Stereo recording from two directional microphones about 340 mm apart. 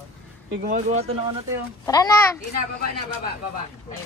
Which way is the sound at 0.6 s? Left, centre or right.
Right.